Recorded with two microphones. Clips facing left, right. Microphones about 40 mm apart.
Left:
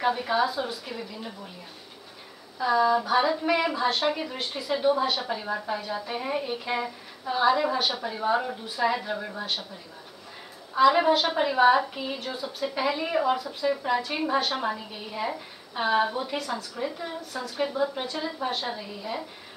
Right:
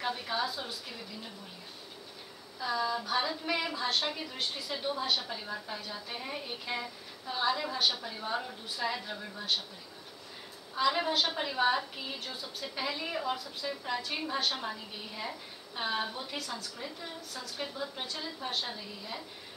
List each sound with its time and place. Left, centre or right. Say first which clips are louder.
0.0 s a woman's voice: left 9 dB; centre
2.6 s a woman's voice: left 10 dB; centre
10.8 s a woman's voice: left 9 dB; centre